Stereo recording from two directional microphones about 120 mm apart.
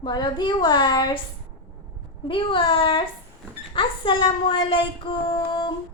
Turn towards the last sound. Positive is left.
turn(degrees=40)  # may be behind; listen again after turning